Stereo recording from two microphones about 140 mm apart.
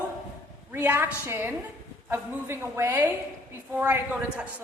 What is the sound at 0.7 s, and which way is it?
A woman's voice, 15° right (ahead or behind).